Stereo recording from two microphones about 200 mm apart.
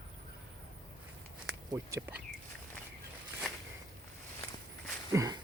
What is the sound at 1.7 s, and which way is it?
Speech, 15° right (ahead or behind).